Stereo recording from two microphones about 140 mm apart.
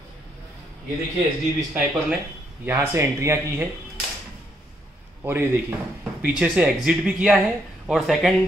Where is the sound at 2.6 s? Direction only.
15° right (ahead or behind).